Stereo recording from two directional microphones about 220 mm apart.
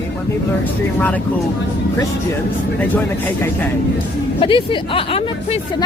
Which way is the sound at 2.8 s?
10° left (ahead or behind).